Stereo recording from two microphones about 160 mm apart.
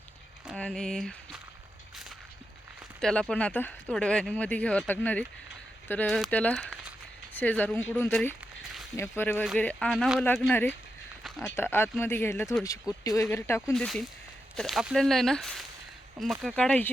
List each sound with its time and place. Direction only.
0.4 s a sound: 5° left (ahead or behind)
3.0 s speech: 5° left (ahead or behind)
10.5 s speech: 15° left (ahead or behind)
13.7 s speech: centre (ahead or behind)